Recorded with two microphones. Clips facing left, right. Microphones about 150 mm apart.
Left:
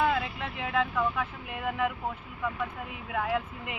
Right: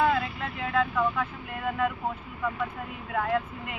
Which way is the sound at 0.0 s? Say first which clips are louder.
Right 2 dB; 15° left (ahead or behind).